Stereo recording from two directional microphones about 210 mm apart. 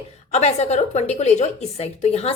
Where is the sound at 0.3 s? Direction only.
30° left (ahead or behind).